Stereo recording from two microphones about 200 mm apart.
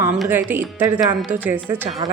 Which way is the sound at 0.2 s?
10° right (ahead or behind).